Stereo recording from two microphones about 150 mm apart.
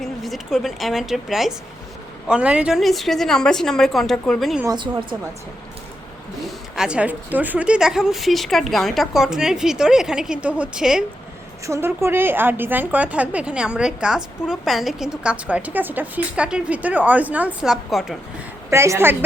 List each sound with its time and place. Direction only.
0.0 s a woman's voice: centre (ahead or behind)
4.6 s a woman's voice: 30° right (ahead or behind)
6.7 s a woman's voice: 5° right (ahead or behind)
11.6 s a woman's voice: 20° right (ahead or behind); by 18.2 s centre (ahead or behind)
18.7 s a woman's voice: 20° right (ahead or behind)